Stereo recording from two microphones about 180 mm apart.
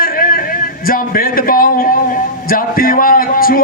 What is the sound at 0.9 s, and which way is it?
A man's voice, 50° left (ahead or behind).